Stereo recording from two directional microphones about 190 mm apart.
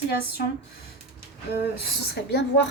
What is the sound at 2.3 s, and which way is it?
Speech, 65° left (ahead or behind).